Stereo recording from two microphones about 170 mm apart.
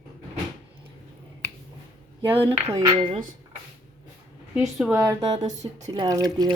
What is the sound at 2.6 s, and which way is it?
Speech, 20° right (ahead or behind).